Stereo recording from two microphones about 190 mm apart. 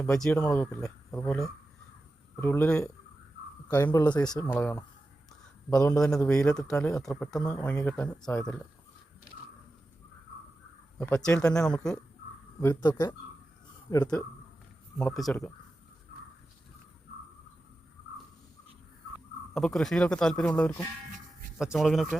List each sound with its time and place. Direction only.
0.0 s speech: 5° left (ahead or behind)
5.9 s speech: 5° left (ahead or behind)
10.9 s speech: 10° left (ahead or behind)
12.5 s speech: 20° left (ahead or behind)
13.9 s speech: 15° left (ahead or behind)
15.0 s speech: centre (ahead or behind)
19.5 s speech: centre (ahead or behind)